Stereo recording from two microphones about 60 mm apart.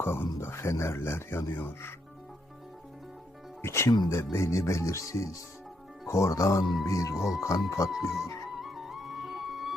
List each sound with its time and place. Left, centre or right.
0.0 s speech: left
3.6 s speech: left
7.2 s speech: centre
7.4 s speech: left
8.6 s music: centre